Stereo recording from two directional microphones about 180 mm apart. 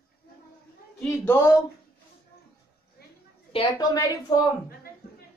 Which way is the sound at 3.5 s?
30° left (ahead or behind).